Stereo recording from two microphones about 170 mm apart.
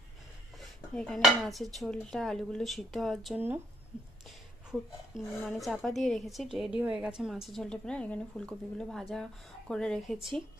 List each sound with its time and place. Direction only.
0.9 s a woman's voice: centre (ahead or behind)
4.7 s a woman's voice: centre (ahead or behind)